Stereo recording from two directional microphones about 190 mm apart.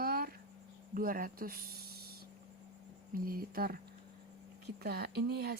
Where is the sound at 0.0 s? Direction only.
50° right (ahead or behind).